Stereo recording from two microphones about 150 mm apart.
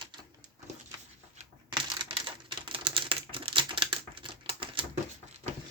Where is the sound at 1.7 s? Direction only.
30° right (ahead or behind).